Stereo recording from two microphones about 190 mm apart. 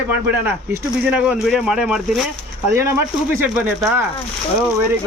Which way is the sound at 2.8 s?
15° right (ahead or behind).